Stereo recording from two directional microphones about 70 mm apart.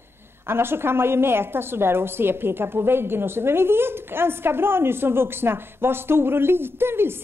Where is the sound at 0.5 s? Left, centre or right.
Right.